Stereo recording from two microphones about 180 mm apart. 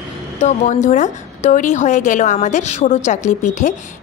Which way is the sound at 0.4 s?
40° left (ahead or behind).